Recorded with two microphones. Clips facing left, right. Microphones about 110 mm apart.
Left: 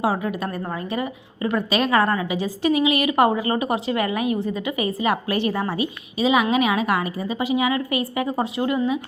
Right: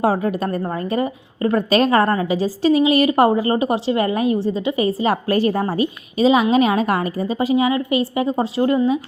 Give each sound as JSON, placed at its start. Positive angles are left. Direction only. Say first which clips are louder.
{"t": 0.0, "sound": "a woman's voice", "louder": "right 4 dB", "side_deg": -45}